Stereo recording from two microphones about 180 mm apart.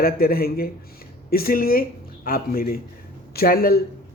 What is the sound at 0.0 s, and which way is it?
Speech, 55° left (ahead or behind).